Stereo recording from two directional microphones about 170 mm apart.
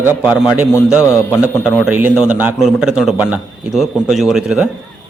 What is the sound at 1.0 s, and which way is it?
Speech, 15° left (ahead or behind).